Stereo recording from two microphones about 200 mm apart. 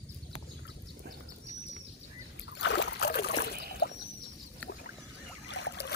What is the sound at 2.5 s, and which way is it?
Trickle, 60° left (ahead or behind).